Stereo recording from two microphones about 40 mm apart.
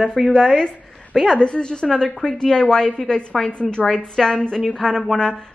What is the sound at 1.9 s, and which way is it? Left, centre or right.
Speech, centre.